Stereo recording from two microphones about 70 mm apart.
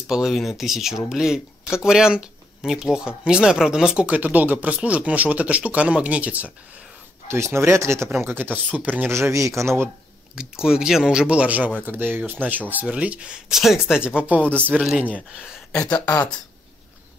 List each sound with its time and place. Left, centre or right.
0.1 s speech: centre
7.2 s speech: right
9.1 s speech: right
10.3 s speech: centre
13.5 s speech: centre; by 14.8 s right
14.8 s speech: centre
15.7 s speech: centre